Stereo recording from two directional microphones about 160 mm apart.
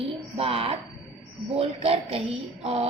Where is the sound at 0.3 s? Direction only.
35° right (ahead or behind).